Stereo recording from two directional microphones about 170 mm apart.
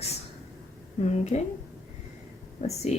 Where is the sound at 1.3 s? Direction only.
35° left (ahead or behind).